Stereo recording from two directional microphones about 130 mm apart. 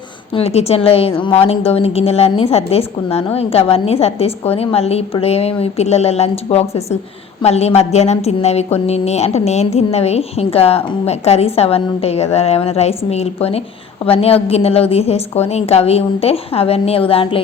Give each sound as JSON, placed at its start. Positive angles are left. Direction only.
{"t": 0.3, "sound": "a woman's voice", "side_deg": 50}